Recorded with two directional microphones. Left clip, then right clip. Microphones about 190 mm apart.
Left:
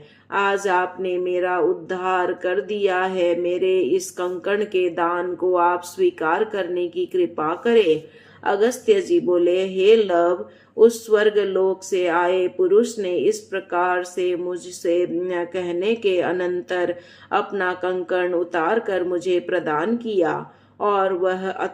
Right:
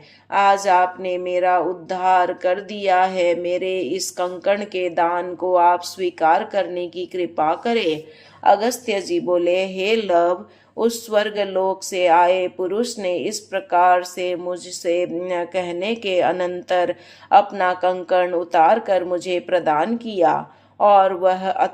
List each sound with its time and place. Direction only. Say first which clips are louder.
0.3 s speech: right 5 dB; 20° right (ahead or behind)